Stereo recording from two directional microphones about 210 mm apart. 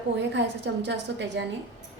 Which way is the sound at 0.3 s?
55° right (ahead or behind).